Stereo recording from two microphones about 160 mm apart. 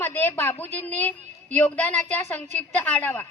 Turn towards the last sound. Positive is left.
turn(degrees=10)  # may be behind; listen again after turning